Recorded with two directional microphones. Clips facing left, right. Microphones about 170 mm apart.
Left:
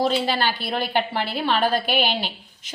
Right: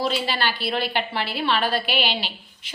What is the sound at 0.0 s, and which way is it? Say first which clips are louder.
A woman's voice: left 3 dB; 45° left (ahead or behind).